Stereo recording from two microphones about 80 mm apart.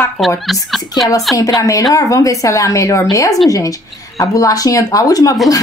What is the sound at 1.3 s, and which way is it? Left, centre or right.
Speech, left.